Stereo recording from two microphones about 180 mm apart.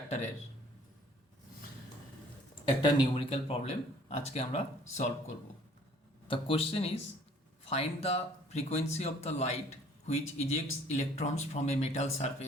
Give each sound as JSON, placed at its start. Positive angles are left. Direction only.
{"t": 2.8, "sound": "speech", "side_deg": 25}
{"t": 6.2, "sound": "speech", "side_deg": 30}